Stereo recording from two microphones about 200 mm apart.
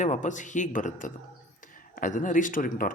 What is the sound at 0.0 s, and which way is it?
A man's voice, 40° left (ahead or behind).